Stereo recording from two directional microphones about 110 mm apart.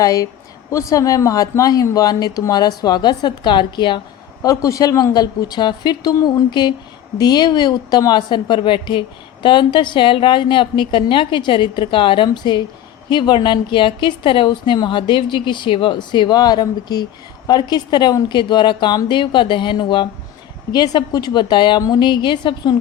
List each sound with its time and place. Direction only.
0.0 s speech: 30° left (ahead or behind)
4.4 s a woman's voice: 30° left (ahead or behind)